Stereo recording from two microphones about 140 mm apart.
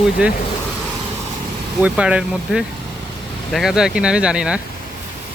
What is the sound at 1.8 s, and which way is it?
Speech, 5° right (ahead or behind).